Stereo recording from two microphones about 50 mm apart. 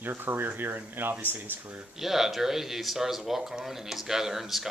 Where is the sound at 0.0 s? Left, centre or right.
Right.